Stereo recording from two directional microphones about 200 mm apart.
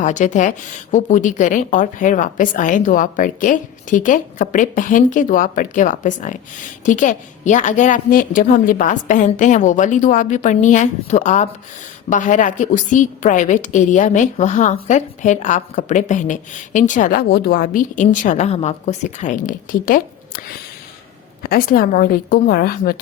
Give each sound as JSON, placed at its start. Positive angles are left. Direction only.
{"t": 0.0, "sound": "a woman's voice", "side_deg": 35}
{"t": 21.4, "sound": "speech", "side_deg": 45}